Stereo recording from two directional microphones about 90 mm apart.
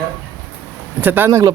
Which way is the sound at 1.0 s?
25° right (ahead or behind).